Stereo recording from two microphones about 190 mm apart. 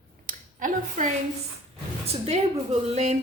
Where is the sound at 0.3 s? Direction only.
45° right (ahead or behind).